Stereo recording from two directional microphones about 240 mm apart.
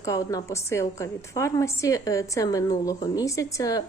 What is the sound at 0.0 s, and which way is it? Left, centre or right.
A woman's voice, centre.